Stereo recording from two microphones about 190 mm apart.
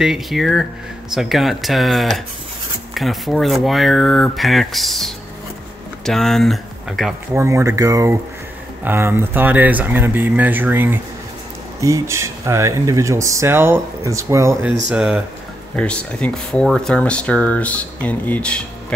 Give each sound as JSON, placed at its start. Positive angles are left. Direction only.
{"t": 0.0, "sound": "speech", "side_deg": 0}
{"t": 7.3, "sound": "speech", "side_deg": -15}
{"t": 14.9, "sound": "speech", "side_deg": -5}
{"t": 15.7, "sound": "speech", "side_deg": 5}